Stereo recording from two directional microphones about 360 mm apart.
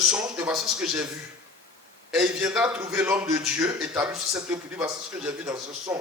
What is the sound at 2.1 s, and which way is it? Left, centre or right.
A man's voice, centre.